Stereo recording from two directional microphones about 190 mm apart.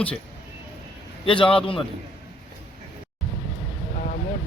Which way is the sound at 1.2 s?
30° left (ahead or behind).